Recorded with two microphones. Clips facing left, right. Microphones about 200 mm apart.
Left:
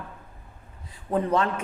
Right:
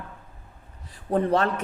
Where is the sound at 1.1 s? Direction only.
40° right (ahead or behind).